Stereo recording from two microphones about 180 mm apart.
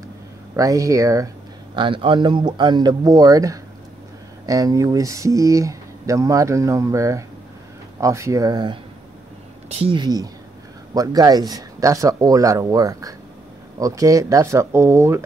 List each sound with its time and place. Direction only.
0.6 s speech: 20° right (ahead or behind)
1.8 s speech: 30° right (ahead or behind)